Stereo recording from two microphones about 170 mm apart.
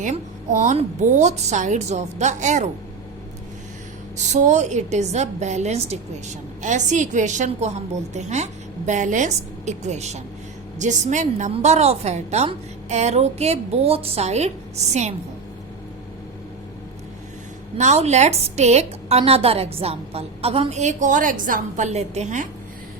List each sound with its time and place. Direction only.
0.0 s a woman's voice: 45° right (ahead or behind)
4.2 s a woman's voice: 45° right (ahead or behind)
17.7 s a woman's voice: 40° right (ahead or behind)